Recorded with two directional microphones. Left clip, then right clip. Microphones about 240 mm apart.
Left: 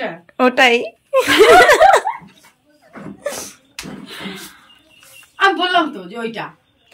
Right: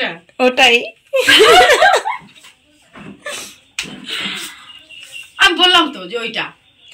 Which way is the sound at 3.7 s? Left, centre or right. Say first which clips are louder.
Right 8 dB; centre.